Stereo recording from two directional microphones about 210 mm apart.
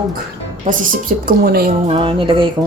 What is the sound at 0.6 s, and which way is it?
Speech, 45° right (ahead or behind).